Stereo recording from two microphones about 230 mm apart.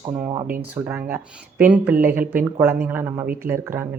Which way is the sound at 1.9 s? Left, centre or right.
Right.